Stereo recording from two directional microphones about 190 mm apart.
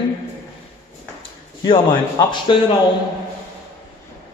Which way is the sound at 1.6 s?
25° left (ahead or behind).